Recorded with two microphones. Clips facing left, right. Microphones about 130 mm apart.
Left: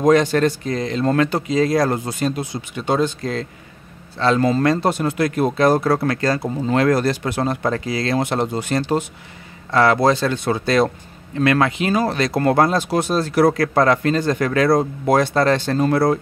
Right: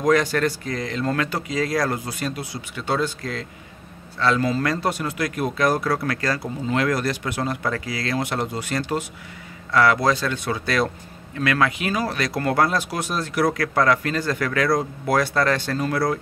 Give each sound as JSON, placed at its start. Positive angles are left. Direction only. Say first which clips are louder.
{"t": 0.0, "sound": "speech", "louder": "left 5 dB", "side_deg": 25}